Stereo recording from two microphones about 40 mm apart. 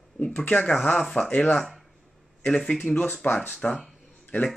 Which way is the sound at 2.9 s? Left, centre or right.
Left.